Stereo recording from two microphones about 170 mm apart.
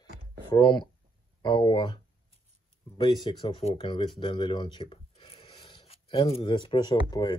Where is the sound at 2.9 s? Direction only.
25° left (ahead or behind).